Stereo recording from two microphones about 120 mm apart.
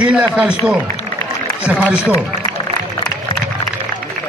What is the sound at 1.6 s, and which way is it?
Speech, 10° right (ahead or behind).